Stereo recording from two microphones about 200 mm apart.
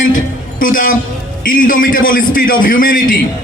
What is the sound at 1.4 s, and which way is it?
A man's voice, 45° left (ahead or behind).